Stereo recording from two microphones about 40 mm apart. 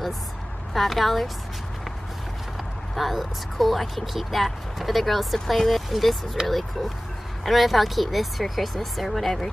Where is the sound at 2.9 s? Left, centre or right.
Centre.